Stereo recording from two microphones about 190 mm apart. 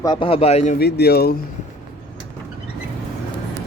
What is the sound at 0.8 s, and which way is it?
Speech, 60° left (ahead or behind).